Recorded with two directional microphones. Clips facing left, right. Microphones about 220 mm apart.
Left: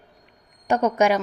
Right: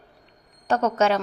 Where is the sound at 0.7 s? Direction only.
15° left (ahead or behind).